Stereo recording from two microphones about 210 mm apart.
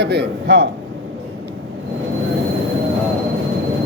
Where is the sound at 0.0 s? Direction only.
55° right (ahead or behind).